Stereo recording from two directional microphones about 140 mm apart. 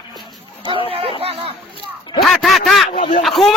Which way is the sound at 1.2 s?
45° right (ahead or behind).